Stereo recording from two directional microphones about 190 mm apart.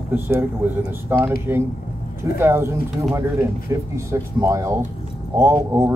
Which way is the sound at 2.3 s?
15° right (ahead or behind).